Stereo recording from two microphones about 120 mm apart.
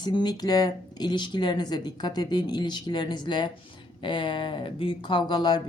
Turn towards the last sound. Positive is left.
turn(degrees=35)  # may be behind; listen again after turning